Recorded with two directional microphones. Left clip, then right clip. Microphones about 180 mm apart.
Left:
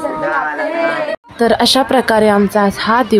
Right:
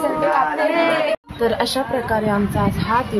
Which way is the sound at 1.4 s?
45° left (ahead or behind).